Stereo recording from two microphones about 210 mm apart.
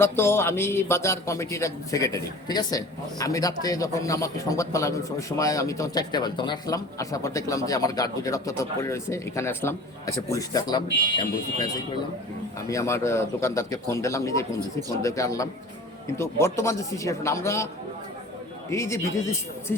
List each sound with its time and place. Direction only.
0.0 s speech: 10° left (ahead or behind)
12.6 s speech: 15° left (ahead or behind)
18.7 s speech: 15° left (ahead or behind)